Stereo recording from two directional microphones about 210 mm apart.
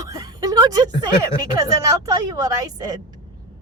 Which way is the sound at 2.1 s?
15° right (ahead or behind).